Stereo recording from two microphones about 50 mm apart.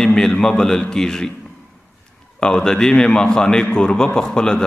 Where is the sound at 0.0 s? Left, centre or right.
Centre.